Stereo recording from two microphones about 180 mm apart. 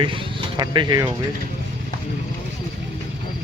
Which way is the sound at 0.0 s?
30° right (ahead or behind).